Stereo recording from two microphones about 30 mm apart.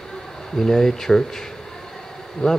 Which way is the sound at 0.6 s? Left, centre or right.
Centre.